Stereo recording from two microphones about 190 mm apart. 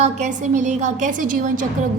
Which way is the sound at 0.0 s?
40° right (ahead or behind).